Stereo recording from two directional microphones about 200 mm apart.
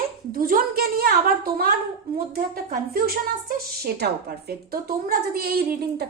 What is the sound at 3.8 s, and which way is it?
A woman's voice, 55° right (ahead or behind).